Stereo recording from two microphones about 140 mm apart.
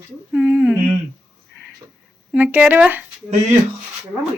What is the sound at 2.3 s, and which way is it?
Speech, 15° right (ahead or behind).